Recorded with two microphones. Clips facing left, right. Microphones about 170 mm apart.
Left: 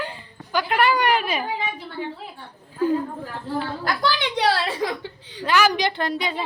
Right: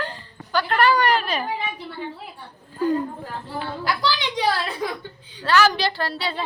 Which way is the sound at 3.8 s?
50° left (ahead or behind).